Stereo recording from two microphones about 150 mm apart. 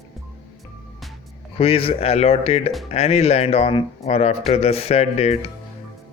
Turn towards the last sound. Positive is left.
turn(degrees=45)  # may be behind; listen again after turning